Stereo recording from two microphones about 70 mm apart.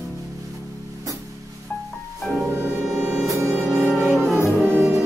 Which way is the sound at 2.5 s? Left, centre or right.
Right.